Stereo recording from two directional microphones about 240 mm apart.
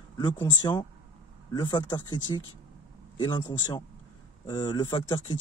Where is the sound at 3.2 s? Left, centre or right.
Centre.